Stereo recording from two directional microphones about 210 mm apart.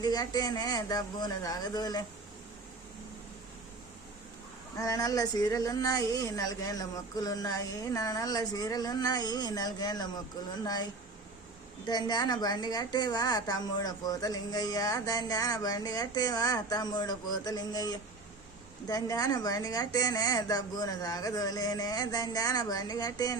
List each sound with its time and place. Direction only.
0.0 s speech: 20° left (ahead or behind)
4.8 s a woman's voice: 15° left (ahead or behind)
11.9 s a woman's voice: 20° left (ahead or behind)